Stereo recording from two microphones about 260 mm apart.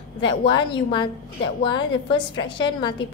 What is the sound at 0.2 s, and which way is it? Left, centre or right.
A woman's voice, centre.